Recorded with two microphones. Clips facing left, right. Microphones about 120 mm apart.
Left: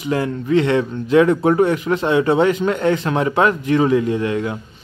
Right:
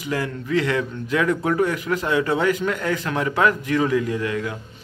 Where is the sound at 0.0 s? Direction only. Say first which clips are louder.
Left 5 dB; 25° left (ahead or behind).